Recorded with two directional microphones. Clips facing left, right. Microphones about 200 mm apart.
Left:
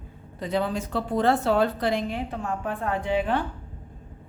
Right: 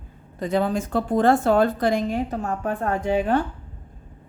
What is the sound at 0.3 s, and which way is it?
Speech, 45° right (ahead or behind).